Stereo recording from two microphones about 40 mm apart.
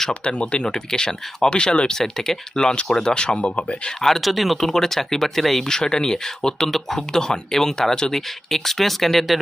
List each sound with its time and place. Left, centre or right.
0.1 s speech: left
2.0 s speech: centre; by 3.8 s left
4.0 s speech: centre
5.6 s speech: centre